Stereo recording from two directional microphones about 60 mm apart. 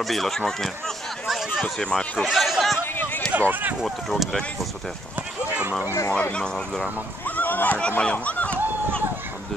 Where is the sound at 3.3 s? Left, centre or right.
Right.